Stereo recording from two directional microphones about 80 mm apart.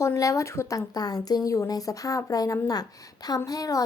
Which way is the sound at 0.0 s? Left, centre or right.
Left.